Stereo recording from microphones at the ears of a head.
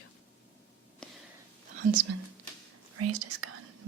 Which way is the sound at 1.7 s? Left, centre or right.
Right.